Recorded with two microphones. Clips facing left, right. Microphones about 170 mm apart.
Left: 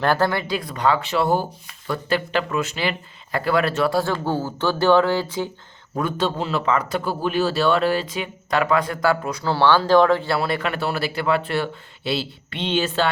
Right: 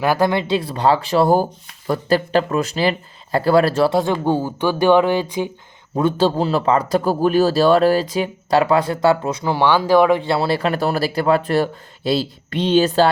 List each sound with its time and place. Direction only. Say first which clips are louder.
0.0 s a man's voice: right 3 dB; 10° right (ahead or behind); by 3.9 s 35° right (ahead or behind)
3.9 s speech: right 4 dB; 20° right (ahead or behind)
6.0 s a man's voice: right 6 dB; 30° right (ahead or behind)